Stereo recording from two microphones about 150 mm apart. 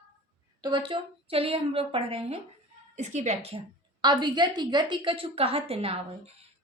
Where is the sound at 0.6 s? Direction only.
35° right (ahead or behind).